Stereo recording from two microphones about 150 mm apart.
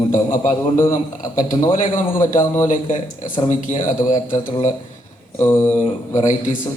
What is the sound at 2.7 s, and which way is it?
Speech, 65° left (ahead or behind).